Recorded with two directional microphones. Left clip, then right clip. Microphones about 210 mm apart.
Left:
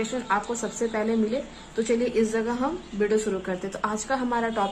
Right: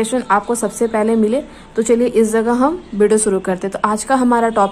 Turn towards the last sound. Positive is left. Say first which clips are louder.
# right 12 dB
turn(degrees=-35)  # may be behind; listen again after turning